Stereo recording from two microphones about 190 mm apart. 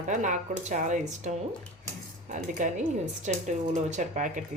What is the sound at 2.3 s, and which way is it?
A woman's voice, 40° right (ahead or behind).